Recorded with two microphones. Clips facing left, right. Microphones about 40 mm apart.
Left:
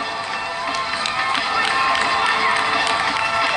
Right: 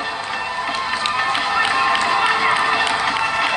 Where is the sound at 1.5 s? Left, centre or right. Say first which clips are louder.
Right 1 dB; right.